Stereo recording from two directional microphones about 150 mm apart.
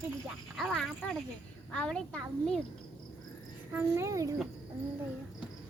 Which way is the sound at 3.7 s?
15° right (ahead or behind).